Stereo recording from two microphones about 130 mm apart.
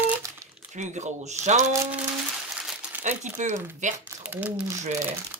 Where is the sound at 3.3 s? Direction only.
70° right (ahead or behind).